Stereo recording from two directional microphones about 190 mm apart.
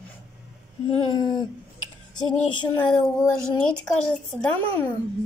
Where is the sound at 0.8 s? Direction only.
25° left (ahead or behind).